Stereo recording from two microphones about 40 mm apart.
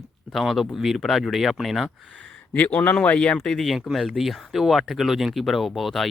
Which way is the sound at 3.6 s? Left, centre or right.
Centre.